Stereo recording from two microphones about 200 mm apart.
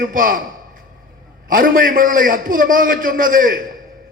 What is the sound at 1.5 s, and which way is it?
A man's voice, 45° right (ahead or behind).